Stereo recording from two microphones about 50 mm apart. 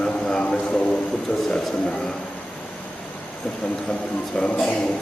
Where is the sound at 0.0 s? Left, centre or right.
Centre.